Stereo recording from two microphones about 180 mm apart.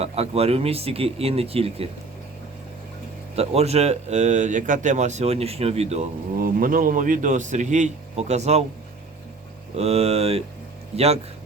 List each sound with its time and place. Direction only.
0.0 s speech: 35° right (ahead or behind)
3.3 s speech: 35° right (ahead or behind)
6.3 s a man's voice: 50° right (ahead or behind)
9.7 s speech: 35° right (ahead or behind)